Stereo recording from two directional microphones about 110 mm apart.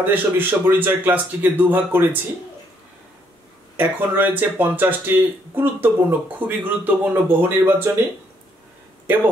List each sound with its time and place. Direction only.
0.0 s speech: 20° right (ahead or behind)
3.7 s speech: 20° right (ahead or behind)
9.0 s speech: 15° right (ahead or behind)